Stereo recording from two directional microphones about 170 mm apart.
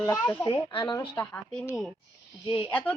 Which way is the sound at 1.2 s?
10° left (ahead or behind).